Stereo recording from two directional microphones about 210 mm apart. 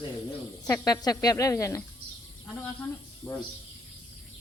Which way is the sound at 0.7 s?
15° left (ahead or behind).